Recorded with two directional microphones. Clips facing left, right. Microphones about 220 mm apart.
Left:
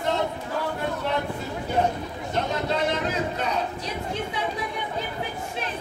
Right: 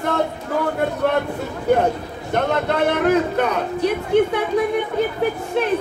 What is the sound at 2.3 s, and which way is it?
A man's voice, 60° right (ahead or behind).